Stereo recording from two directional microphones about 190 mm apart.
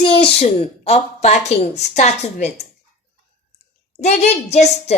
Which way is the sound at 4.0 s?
35° left (ahead or behind).